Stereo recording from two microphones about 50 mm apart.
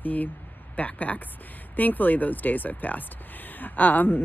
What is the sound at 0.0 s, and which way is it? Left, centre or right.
Speech, left.